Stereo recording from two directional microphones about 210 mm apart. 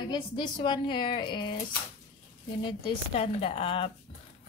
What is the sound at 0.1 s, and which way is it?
Speech, 20° left (ahead or behind).